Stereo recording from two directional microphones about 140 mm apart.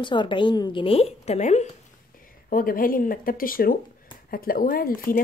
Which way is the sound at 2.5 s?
90° left.